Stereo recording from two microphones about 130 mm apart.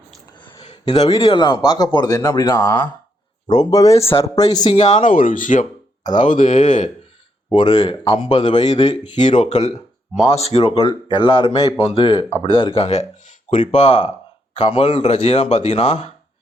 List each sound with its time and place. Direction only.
0.3 s a sound: 40° left (ahead or behind)
0.9 s speech: 50° left (ahead or behind); by 3.9 s 30° left (ahead or behind)
3.9 s a man's voice: 50° left (ahead or behind)
4.2 s speech: 30° left (ahead or behind)
4.7 s speech: 60° left (ahead or behind); by 5.6 s 85° left
6.4 s speech: 70° left (ahead or behind)
7.5 s speech: 35° left (ahead or behind)
9.4 s a man's voice: 60° left (ahead or behind)
13.5 s speech: 70° left (ahead or behind)
14.5 s a man's voice: 40° left (ahead or behind)